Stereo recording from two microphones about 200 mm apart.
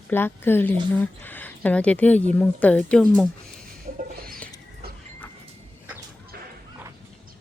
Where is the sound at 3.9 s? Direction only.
35° right (ahead or behind).